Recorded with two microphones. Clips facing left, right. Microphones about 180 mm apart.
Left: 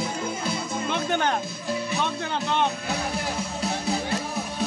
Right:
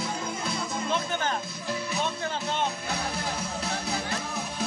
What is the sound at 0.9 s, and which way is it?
Music, 65° left (ahead or behind).